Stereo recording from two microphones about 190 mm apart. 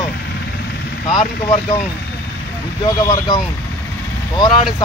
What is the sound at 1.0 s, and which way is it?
Speech, 25° left (ahead or behind).